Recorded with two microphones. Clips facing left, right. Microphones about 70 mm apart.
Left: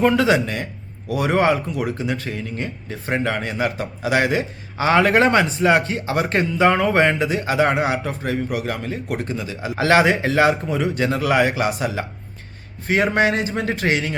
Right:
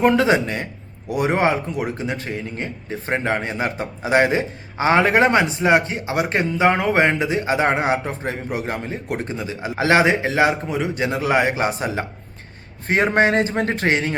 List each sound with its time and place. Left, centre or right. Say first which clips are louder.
0.0 s a man's voice: even; right